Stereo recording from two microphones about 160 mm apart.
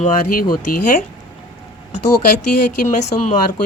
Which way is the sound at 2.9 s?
45° left (ahead or behind).